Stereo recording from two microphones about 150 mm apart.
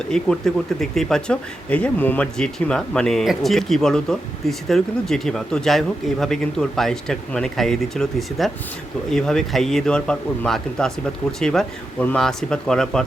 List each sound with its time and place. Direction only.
0.1 s speech: 5° left (ahead or behind)